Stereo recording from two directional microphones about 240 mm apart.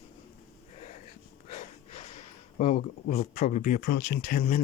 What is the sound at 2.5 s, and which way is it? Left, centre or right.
Speech, left.